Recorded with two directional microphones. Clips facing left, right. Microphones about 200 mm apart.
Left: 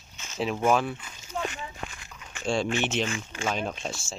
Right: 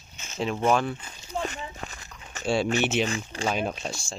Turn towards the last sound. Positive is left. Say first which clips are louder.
# right 2 dB
turn(degrees=0)  # may be behind; listen again after turning